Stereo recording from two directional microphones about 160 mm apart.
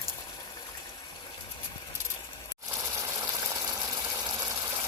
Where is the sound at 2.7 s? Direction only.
20° right (ahead or behind).